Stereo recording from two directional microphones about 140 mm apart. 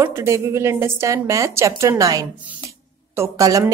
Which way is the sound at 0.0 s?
20° right (ahead or behind).